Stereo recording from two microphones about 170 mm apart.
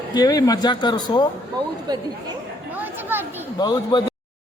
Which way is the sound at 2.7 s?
10° right (ahead or behind).